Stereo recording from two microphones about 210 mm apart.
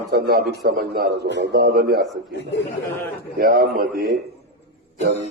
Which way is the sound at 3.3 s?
45° right (ahead or behind).